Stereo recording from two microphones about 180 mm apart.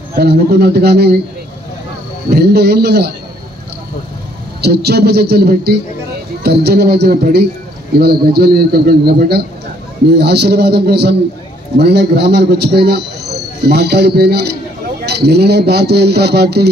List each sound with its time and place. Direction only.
0.1 s a man's voice: 60° right (ahead or behind)
2.3 s a man's voice: 65° right (ahead or behind)
4.6 s a man's voice: 65° right (ahead or behind)